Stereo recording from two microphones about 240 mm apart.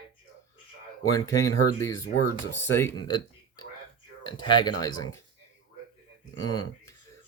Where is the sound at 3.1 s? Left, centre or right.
Centre.